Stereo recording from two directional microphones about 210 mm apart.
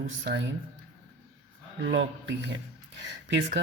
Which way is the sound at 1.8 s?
60° right (ahead or behind).